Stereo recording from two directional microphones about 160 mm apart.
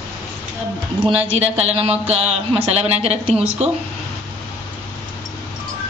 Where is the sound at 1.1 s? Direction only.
40° right (ahead or behind).